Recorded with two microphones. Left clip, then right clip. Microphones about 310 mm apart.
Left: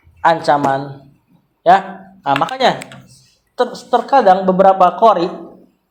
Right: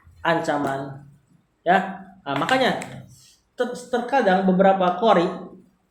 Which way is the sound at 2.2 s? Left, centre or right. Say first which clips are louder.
Left 7 dB; left.